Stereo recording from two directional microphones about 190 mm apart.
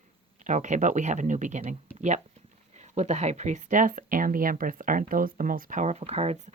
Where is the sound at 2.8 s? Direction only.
35° right (ahead or behind).